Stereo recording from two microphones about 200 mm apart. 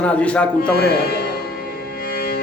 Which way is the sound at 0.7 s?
50° left (ahead or behind).